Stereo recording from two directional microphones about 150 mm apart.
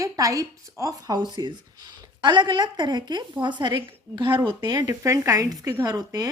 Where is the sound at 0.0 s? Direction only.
20° right (ahead or behind).